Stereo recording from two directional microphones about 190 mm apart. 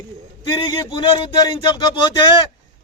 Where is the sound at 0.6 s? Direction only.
25° left (ahead or behind).